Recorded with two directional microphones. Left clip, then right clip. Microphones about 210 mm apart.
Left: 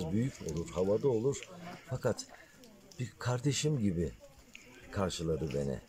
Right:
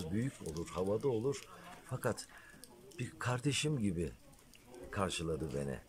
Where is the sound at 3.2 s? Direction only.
10° left (ahead or behind).